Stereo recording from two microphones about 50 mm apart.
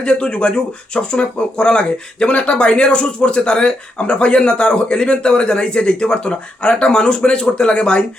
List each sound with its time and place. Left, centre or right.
0.0 s speech: centre